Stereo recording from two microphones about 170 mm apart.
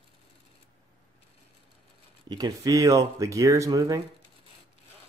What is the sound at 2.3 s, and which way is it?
Speech, 20° right (ahead or behind).